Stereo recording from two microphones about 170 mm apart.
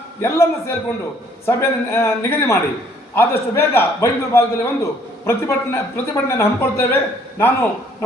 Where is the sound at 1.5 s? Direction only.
15° left (ahead or behind).